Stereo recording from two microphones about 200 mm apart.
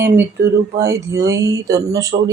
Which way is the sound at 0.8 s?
15° right (ahead or behind).